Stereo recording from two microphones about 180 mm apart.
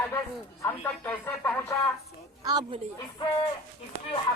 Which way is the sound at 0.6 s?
10° left (ahead or behind).